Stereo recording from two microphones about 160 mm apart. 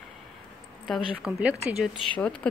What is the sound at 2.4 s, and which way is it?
Speech, 5° left (ahead or behind).